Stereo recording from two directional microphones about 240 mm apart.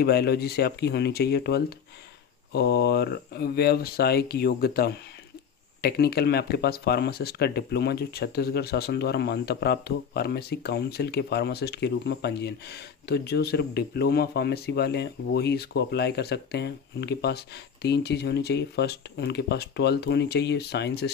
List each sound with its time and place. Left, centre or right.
0.0 s speech: left